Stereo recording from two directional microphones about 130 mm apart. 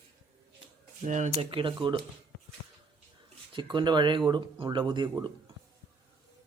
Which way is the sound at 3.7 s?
35° right (ahead or behind).